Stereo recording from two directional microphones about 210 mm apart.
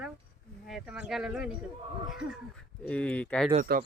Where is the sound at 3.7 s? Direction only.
45° right (ahead or behind).